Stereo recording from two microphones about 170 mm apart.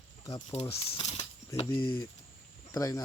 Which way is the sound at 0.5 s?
40° left (ahead or behind).